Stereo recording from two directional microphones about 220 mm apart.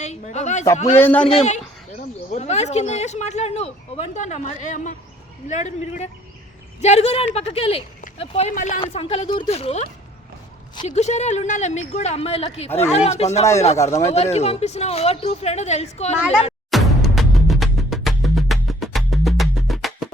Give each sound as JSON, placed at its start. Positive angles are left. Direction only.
{"t": 0.0, "sound": "speech", "side_deg": 30}
{"t": 1.0, "sound": "speech", "side_deg": 5}
{"t": 1.3, "sound": "speech", "side_deg": 30}
{"t": 13.4, "sound": "speech", "side_deg": 15}
{"t": 14.1, "sound": "speech", "side_deg": 30}
{"t": 16.7, "sound": "music", "side_deg": 0}